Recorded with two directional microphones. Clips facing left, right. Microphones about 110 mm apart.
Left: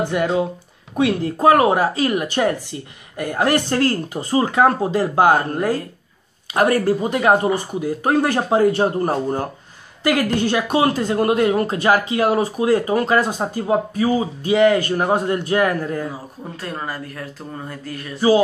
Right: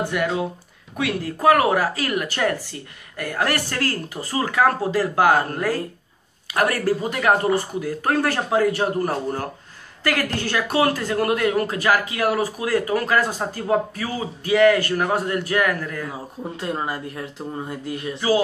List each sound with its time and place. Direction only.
0.1 s speech: 25° left (ahead or behind)
16.5 s speech: 20° right (ahead or behind)